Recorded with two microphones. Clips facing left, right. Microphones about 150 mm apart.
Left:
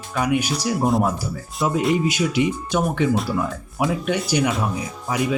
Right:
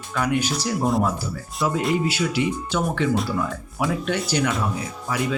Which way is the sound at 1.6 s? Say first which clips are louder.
Left 2 dB; 20° left (ahead or behind).